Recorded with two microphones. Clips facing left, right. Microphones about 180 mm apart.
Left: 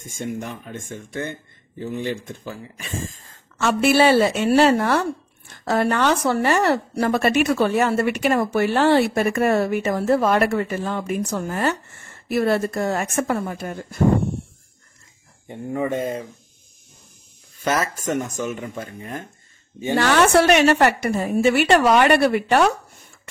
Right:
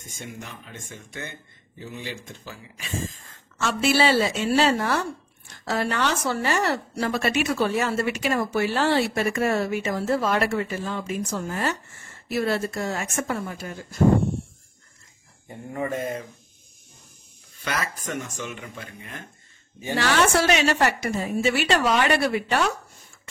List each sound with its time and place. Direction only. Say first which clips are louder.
0.0 s a woman's voice: left 10 dB; 50° left (ahead or behind)
15.4 s speech: left 5 dB; 25° left (ahead or behind)
17.6 s speech: left 7 dB; 45° left (ahead or behind)
20.0 s a woman's voice: left 5 dB; 55° left (ahead or behind)